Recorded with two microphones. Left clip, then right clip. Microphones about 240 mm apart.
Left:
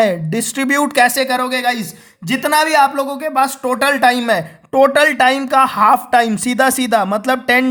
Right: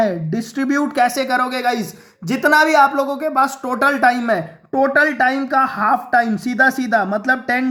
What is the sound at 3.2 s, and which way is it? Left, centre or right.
Speech, left.